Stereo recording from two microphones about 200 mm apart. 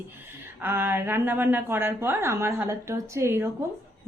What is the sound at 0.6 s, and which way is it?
A woman's voice, 10° right (ahead or behind).